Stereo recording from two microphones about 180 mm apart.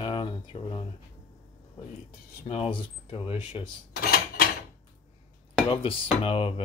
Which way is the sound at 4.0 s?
55° left (ahead or behind).